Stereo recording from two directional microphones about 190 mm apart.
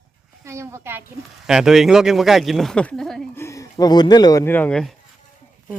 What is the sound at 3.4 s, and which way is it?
Speech, 15° left (ahead or behind).